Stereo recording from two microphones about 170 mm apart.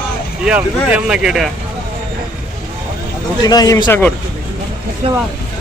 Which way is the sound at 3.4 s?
20° left (ahead or behind).